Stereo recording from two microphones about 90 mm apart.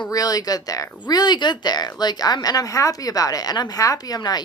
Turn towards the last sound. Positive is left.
turn(degrees=50)  # may be behind; listen again after turning